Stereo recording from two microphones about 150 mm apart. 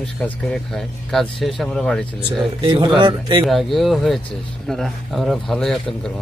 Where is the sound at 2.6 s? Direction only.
35° right (ahead or behind).